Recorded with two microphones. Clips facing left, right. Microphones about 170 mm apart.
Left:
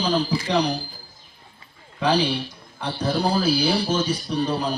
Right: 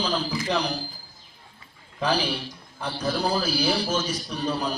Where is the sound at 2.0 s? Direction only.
30° left (ahead or behind).